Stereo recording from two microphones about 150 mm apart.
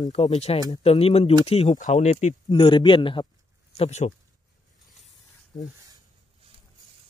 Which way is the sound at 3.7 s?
45° left (ahead or behind).